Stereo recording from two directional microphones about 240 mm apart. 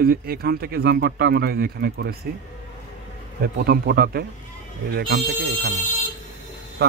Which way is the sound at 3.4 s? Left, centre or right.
Right.